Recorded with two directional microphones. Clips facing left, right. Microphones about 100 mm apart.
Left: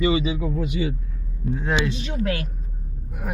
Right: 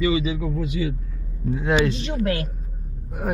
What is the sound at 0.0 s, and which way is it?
Speech, 25° left (ahead or behind).